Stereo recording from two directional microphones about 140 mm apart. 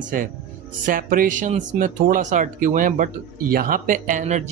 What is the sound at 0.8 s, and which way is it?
A man's voice, 85° right.